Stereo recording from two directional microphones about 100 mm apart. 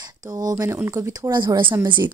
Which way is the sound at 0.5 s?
25° right (ahead or behind).